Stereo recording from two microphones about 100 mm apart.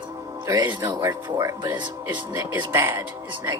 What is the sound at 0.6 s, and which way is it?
Speech, 45° right (ahead or behind).